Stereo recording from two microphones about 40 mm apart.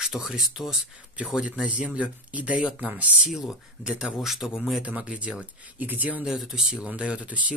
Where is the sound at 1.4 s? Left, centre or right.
Right.